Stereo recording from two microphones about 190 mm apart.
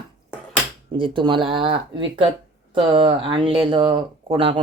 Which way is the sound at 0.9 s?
25° right (ahead or behind).